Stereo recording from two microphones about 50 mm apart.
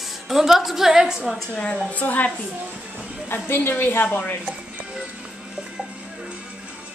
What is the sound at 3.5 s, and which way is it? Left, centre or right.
Speech, left.